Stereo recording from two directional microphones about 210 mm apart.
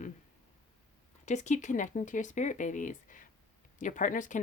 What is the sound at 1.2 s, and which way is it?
Speech, 35° left (ahead or behind).